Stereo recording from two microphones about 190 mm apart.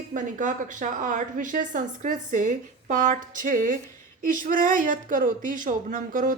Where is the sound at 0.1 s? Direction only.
40° right (ahead or behind).